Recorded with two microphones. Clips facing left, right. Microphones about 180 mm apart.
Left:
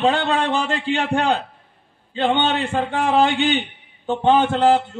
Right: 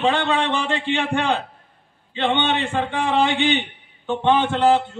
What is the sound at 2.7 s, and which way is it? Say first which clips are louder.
A man's voice: left 2 dB; 40° left (ahead or behind).